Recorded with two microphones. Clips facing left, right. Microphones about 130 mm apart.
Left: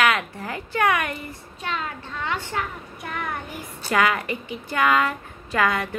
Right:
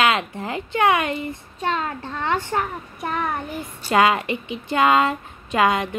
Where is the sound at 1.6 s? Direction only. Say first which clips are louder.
Right 6 dB; 40° right (ahead or behind).